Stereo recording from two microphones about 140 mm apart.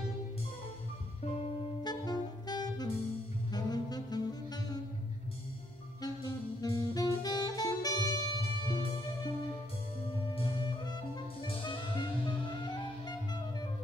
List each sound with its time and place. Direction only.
1.8 s saxophone: 30° left (ahead or behind)
6.0 s saxophone: 25° left (ahead or behind)
10.3 s music: 35° left (ahead or behind)